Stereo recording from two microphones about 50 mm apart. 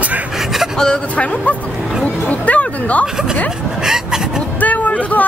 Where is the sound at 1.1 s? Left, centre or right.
Left.